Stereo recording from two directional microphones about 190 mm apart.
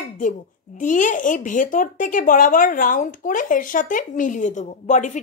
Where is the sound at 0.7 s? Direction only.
40° left (ahead or behind).